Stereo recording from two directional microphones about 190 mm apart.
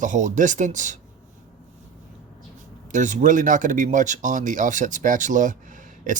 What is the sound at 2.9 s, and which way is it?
Speech, 40° right (ahead or behind).